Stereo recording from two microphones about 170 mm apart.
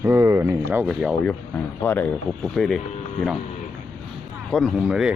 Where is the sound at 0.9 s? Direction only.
Centre (ahead or behind).